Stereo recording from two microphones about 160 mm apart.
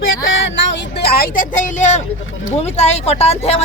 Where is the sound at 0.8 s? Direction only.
85° left.